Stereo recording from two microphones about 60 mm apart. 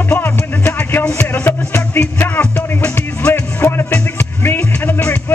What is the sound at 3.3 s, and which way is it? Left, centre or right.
Music, left.